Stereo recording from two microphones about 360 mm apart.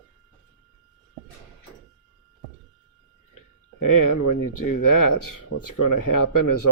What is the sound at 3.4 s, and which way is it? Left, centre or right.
Speech, left.